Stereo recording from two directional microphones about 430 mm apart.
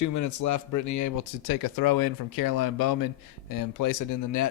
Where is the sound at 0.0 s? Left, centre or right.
Left.